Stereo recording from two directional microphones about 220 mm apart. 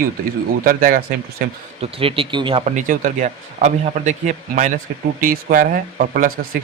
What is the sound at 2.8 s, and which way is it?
A man's voice, 35° right (ahead or behind).